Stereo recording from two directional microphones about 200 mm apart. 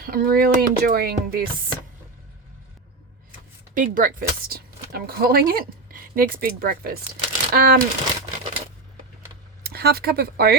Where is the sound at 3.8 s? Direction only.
40° right (ahead or behind).